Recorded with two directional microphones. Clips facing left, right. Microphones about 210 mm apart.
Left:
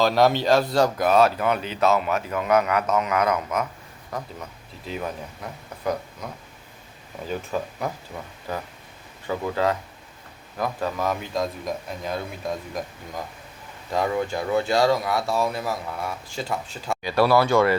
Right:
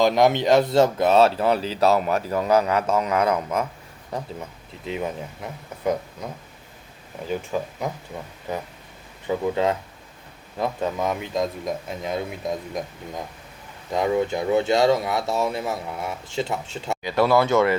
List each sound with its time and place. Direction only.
0.0 s speech: 20° right (ahead or behind)
7.4 s speech: 15° right (ahead or behind)
9.2 s speech: 20° right (ahead or behind)